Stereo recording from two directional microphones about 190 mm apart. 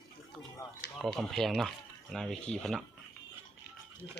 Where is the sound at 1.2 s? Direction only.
Centre (ahead or behind).